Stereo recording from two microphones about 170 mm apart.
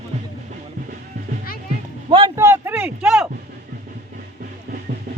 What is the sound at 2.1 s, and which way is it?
Speech, 30° right (ahead or behind).